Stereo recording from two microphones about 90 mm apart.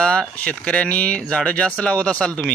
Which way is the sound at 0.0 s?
10° left (ahead or behind).